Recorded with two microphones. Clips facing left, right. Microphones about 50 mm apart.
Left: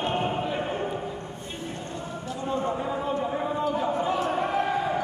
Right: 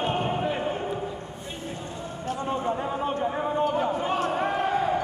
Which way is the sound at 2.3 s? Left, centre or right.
Right.